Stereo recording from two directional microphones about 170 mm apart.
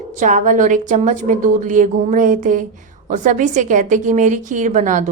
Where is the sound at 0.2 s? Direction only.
50° right (ahead or behind).